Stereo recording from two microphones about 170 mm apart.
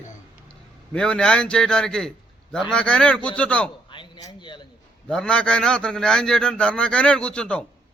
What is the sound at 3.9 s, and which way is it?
Speech, 25° left (ahead or behind).